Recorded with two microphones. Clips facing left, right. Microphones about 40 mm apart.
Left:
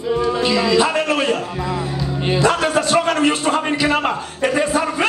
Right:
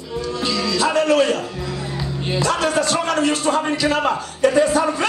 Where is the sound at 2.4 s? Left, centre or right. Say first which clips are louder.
Left 1 dB; left.